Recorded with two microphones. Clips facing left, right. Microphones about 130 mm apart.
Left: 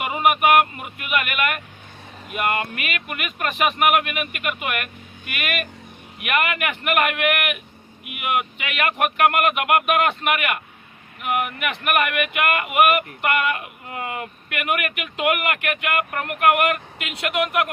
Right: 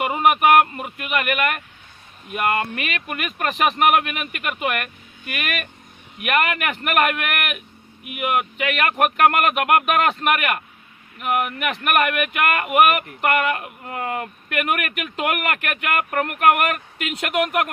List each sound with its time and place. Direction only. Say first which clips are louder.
0.0 s speech: right 2 dB; 35° right (ahead or behind)